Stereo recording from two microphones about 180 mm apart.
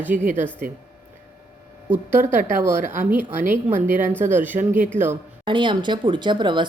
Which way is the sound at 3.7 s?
45° right (ahead or behind).